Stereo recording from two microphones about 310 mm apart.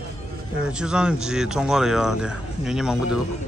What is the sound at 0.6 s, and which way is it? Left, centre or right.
Speech, centre.